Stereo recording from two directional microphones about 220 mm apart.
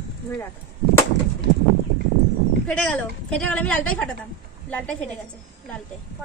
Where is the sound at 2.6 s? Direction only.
5° left (ahead or behind).